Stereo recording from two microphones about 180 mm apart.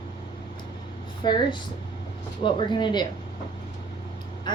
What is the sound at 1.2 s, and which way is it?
A woman's voice, 25° left (ahead or behind).